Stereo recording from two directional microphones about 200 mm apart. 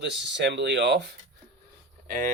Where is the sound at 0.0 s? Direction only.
60° right (ahead or behind).